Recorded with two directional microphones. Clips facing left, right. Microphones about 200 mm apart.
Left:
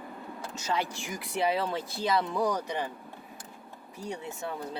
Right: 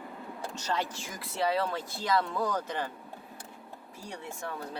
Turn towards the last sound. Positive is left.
turn(degrees=20)  # may be behind; listen again after turning